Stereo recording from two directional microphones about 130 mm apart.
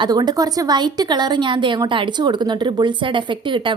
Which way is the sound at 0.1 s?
30° right (ahead or behind).